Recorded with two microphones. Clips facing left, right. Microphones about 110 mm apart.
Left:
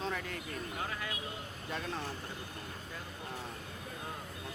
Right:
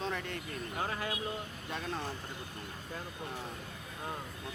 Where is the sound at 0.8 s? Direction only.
35° right (ahead or behind).